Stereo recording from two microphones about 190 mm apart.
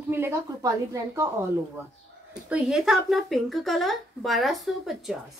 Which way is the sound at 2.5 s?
Centre (ahead or behind).